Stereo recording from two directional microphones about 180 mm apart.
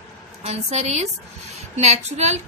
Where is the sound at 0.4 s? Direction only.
35° right (ahead or behind).